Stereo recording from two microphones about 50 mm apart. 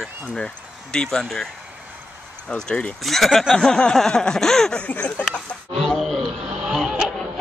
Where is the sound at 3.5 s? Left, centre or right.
Centre.